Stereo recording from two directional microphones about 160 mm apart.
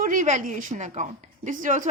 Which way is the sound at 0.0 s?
55° right (ahead or behind).